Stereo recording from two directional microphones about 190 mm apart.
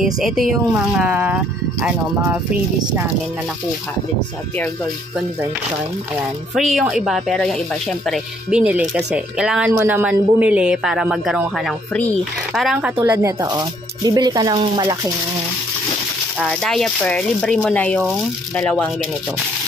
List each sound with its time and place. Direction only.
0.0 s speech: centre (ahead or behind)
6.5 s speech: centre (ahead or behind)
13.0 s speech: 15° right (ahead or behind)
16.3 s speech: centre (ahead or behind)